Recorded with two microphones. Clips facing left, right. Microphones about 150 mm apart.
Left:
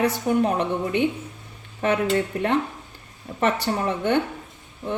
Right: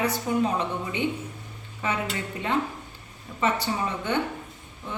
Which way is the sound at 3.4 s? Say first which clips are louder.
Left 3 dB; 60° left (ahead or behind).